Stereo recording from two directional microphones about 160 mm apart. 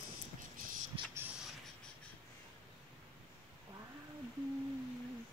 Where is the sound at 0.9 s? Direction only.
35° right (ahead or behind).